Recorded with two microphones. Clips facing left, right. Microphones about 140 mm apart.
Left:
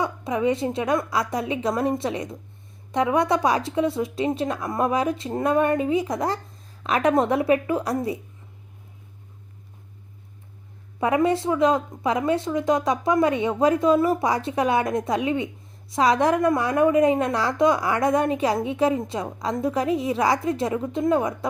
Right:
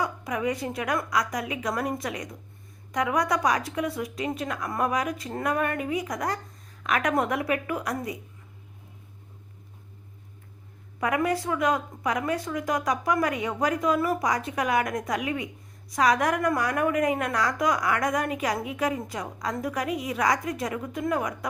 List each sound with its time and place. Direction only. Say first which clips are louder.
0.0 s a woman's voice: left 5 dB; 25° left (ahead or behind)
11.0 s a woman's voice: left 5 dB; 25° left (ahead or behind)